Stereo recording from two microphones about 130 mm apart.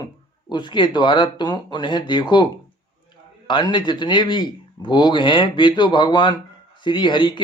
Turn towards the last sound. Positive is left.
turn(degrees=40)  # may be behind; listen again after turning